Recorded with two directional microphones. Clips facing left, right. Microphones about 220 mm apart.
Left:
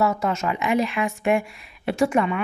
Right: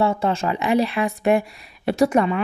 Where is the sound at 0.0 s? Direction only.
30° right (ahead or behind).